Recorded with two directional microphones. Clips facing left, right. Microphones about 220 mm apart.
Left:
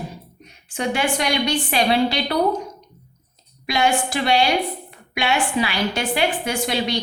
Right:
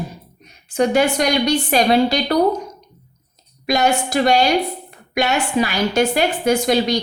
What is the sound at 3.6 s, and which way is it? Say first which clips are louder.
A woman's voice: right 3 dB; 45° right (ahead or behind).